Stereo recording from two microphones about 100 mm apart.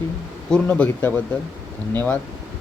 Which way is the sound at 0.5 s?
15° left (ahead or behind).